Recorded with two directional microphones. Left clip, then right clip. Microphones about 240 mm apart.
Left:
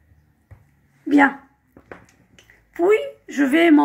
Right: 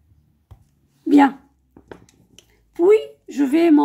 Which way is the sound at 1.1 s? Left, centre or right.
Right.